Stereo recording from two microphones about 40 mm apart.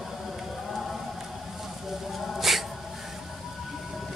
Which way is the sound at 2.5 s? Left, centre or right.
Centre.